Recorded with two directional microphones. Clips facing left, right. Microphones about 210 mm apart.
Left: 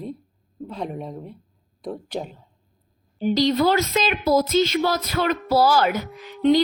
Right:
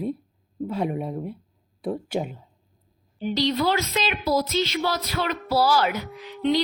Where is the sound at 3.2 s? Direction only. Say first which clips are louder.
Left 4 dB; 45° left (ahead or behind).